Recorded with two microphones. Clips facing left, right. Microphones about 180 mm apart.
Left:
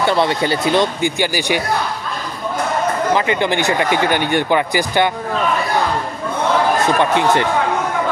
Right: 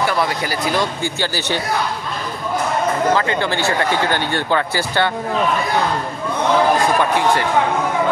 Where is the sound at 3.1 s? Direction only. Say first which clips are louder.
Left 2 dB; 15° left (ahead or behind).